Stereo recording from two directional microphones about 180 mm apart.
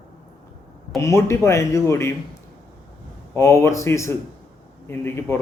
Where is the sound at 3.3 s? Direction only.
15° left (ahead or behind).